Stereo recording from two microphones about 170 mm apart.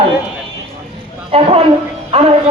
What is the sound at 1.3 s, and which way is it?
Speech, 35° right (ahead or behind).